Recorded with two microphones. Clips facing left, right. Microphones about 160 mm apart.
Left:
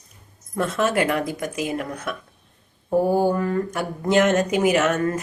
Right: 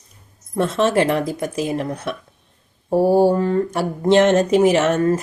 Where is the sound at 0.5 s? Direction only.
30° right (ahead or behind).